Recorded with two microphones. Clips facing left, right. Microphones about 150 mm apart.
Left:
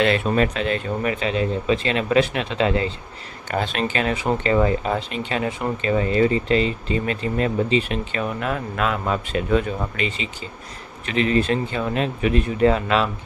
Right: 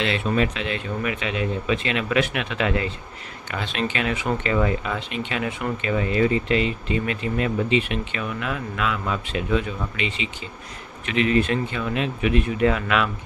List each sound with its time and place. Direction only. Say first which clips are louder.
0.0 s speech: left 4 dB; 45° left (ahead or behind); by 2.9 s 30° left (ahead or behind)
3.5 s speech: left 4 dB; 40° left (ahead or behind)